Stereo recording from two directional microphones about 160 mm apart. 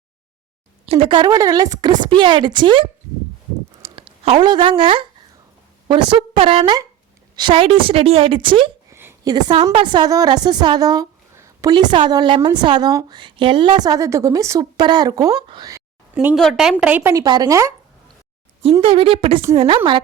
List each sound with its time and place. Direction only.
0.9 s a woman's voice: 35° right (ahead or behind)
3.8 s a woman's voice: 35° right (ahead or behind)
8.9 s a sound: 15° right (ahead or behind)
9.2 s a woman's voice: 25° right (ahead or behind)
16.1 s a woman's voice: 5° right (ahead or behind)
16.8 s speech: 10° right (ahead or behind)
18.6 s a woman's voice: 35° right (ahead or behind)